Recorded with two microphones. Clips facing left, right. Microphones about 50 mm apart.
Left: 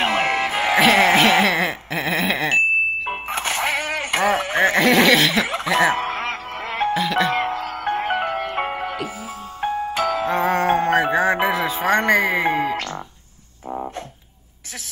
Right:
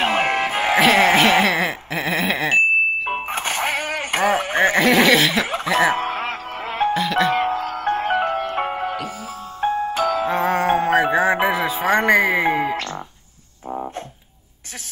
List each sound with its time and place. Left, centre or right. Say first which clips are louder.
0.0 s music: right 1 dB; centre
3.3 s a sound: left 3 dB; right
4.5 s snicker: even; centre
5.5 s cough: even; centre
6.0 s music: even; centre
6.9 s music: right 1 dB; centre